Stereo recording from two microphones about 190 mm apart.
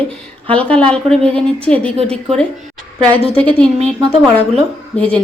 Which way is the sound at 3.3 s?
5° left (ahead or behind).